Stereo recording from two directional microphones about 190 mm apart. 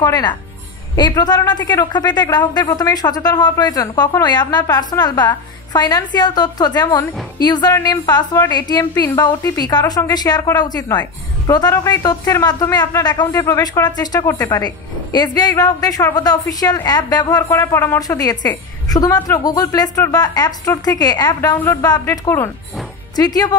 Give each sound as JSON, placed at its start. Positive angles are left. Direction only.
{"t": 0.0, "sound": "a woman's voice", "side_deg": 20}